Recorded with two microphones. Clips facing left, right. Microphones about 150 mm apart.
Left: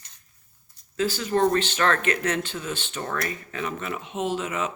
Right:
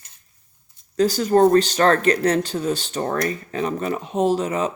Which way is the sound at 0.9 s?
40° right (ahead or behind).